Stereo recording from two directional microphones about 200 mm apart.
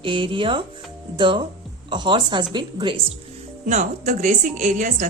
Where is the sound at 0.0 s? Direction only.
25° right (ahead or behind).